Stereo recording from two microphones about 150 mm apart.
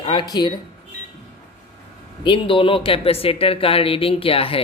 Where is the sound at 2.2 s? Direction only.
35° left (ahead or behind).